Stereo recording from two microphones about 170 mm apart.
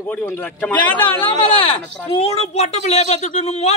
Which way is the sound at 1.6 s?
30° left (ahead or behind).